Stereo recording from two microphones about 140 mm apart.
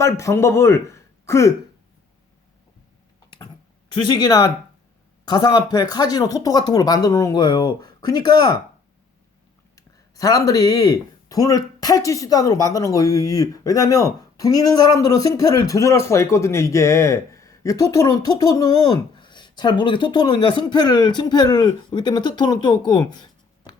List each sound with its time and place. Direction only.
0.0 s speech: 20° left (ahead or behind)
3.2 s a sound: 35° left (ahead or behind)
4.0 s speech: 30° left (ahead or behind)
9.7 s speech: 25° left (ahead or behind)